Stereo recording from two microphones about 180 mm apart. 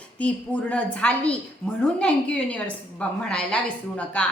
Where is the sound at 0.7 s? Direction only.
5° left (ahead or behind).